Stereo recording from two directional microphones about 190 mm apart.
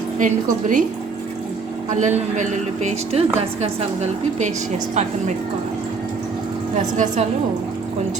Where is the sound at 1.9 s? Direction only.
40° right (ahead or behind).